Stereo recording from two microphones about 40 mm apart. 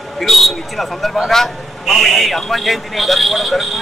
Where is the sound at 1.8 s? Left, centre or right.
Centre.